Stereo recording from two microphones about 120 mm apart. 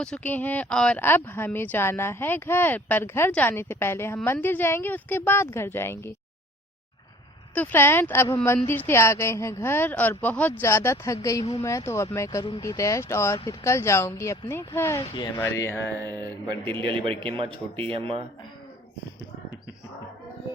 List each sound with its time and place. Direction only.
0.0 s speech: 10° left (ahead or behind)
7.5 s a woman's voice: 15° left (ahead or behind)
16.0 s a sound: 35° right (ahead or behind)
16.8 s speech: 45° right (ahead or behind)